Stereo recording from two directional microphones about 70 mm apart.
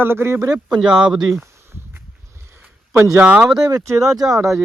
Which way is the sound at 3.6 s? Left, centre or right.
Right.